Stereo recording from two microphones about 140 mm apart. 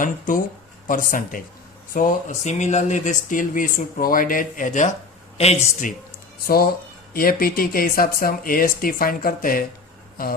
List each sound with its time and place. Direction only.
0.0 s speech: 70° left (ahead or behind)
5.4 s a man's voice: 50° left (ahead or behind)
7.1 s speech: 90° left